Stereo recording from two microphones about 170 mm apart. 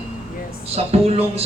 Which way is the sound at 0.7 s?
40° right (ahead or behind).